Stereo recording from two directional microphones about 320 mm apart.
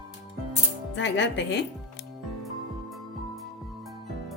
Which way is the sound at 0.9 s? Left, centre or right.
Left.